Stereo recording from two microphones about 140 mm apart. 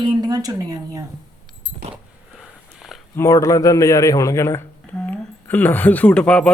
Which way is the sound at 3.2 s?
25° left (ahead or behind).